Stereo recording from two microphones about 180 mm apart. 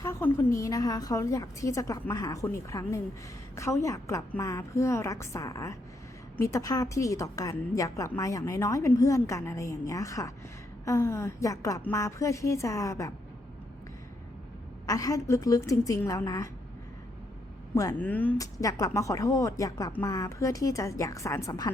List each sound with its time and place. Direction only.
0.0 s a woman's voice: 15° left (ahead or behind)
14.8 s a woman's voice: 20° left (ahead or behind)
17.7 s a woman's voice: 15° left (ahead or behind)